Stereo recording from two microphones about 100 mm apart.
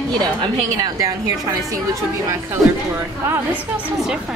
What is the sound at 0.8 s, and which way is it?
Speech, 35° right (ahead or behind).